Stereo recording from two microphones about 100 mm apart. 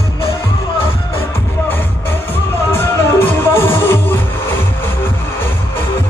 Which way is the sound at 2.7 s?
25° left (ahead or behind).